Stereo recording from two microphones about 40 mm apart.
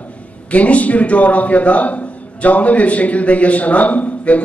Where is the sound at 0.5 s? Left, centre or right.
Left.